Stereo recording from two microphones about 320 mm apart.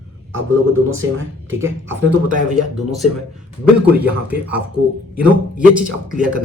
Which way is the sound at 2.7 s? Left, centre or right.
Centre.